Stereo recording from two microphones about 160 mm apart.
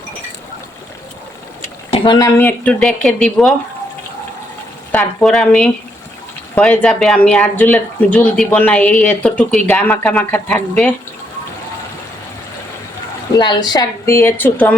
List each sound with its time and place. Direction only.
1.9 s a sound: 30° left (ahead or behind)
2.2 s speech: 10° left (ahead or behind)
4.9 s speech: 5° left (ahead or behind)
13.3 s speech: 25° left (ahead or behind); by 14.8 s 10° left (ahead or behind)